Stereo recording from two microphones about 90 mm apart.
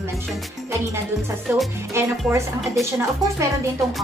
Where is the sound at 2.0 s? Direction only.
30° right (ahead or behind).